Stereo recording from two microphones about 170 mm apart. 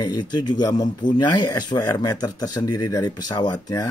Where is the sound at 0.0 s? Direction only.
25° left (ahead or behind).